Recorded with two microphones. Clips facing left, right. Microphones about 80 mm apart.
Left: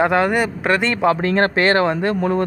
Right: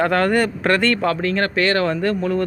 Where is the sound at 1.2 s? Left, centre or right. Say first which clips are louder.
Left 3 dB; left.